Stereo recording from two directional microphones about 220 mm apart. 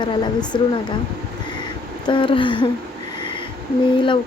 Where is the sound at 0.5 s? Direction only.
20° left (ahead or behind).